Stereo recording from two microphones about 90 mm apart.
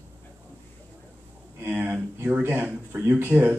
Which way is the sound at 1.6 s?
20° right (ahead or behind).